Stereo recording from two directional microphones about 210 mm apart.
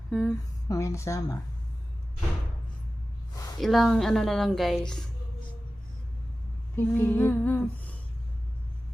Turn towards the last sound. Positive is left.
turn(degrees=10)  # may be behind; listen again after turning